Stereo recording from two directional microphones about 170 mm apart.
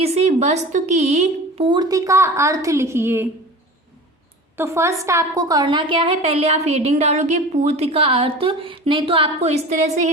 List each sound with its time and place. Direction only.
0.0 s a woman's voice: 40° right (ahead or behind); by 3.2 s 15° right (ahead or behind)
4.5 s a woman's voice: 15° right (ahead or behind); by 10.1 s 45° right (ahead or behind)